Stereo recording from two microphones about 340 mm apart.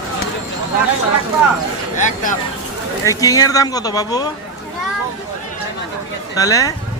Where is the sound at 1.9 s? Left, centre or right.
Left.